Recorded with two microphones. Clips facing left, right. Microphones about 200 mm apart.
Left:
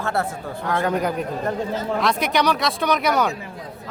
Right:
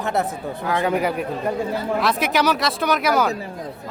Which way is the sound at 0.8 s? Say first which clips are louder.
Right 1 dB; 5° right (ahead or behind).